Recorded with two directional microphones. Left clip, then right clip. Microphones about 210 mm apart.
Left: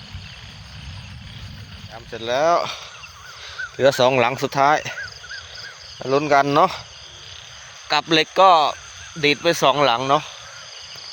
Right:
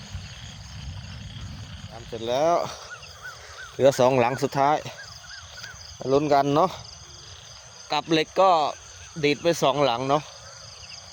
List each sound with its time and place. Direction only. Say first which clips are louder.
2.1 s speech: left 4 dB; 15° right (ahead or behind)
6.1 s speech: left 4 dB; 10° right (ahead or behind)
7.9 s speech: left 6 dB; centre (ahead or behind)